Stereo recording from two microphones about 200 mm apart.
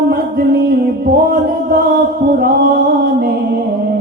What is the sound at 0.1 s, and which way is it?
Music, 50° right (ahead or behind).